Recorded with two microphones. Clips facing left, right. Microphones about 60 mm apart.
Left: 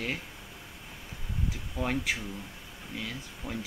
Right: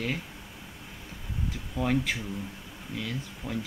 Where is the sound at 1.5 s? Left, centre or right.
Centre.